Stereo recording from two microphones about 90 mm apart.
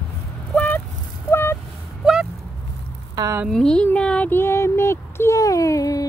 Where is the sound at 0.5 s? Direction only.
20° left (ahead or behind).